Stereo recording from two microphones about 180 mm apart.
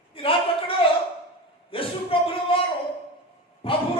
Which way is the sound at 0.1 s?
30° left (ahead or behind).